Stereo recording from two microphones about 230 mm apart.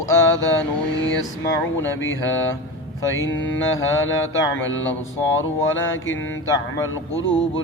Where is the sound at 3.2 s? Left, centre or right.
Left.